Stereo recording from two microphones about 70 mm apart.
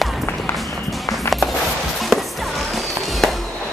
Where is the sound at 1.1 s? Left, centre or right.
Centre.